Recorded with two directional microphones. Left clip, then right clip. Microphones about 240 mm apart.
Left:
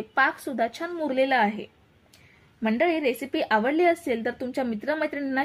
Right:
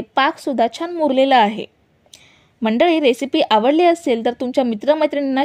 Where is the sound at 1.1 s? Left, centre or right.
Right.